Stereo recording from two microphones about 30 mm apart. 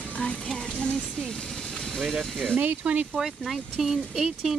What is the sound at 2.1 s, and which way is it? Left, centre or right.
Speech, centre.